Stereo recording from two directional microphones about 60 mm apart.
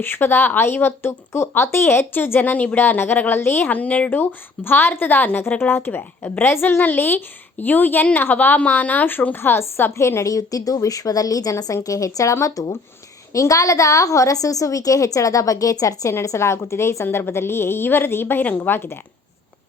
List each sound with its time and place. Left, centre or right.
0.0 s speech: left
4.2 s speech: left
10.2 s a woman's voice: left
16.0 s a woman's voice: left
18.4 s a woman's voice: left
18.7 s a woman's voice: left